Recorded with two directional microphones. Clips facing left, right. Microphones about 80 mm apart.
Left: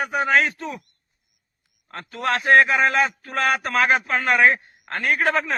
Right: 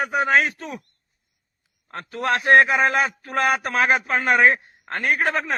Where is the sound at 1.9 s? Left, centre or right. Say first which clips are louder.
Right 1 dB; right.